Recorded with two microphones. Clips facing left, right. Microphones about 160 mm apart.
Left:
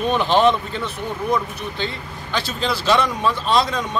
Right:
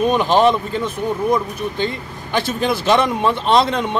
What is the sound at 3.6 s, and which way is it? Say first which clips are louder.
Speech: right 4 dB; 60° right (ahead or behind).